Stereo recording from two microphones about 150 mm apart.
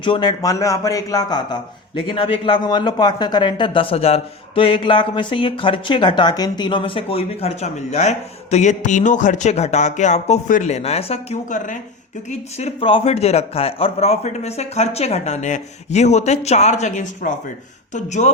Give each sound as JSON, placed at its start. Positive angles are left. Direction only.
{"t": 0.0, "sound": "a man's voice", "side_deg": 30}
{"t": 12.3, "sound": "a man's voice", "side_deg": 45}